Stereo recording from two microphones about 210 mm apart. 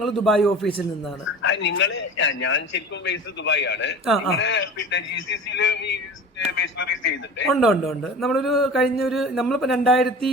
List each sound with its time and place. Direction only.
0.0 s speech: centre (ahead or behind)
1.5 s a man's voice: 55° left (ahead or behind)
7.5 s speech: centre (ahead or behind)